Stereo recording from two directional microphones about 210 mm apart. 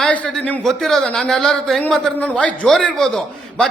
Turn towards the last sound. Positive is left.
turn(degrees=5)  # may be behind; listen again after turning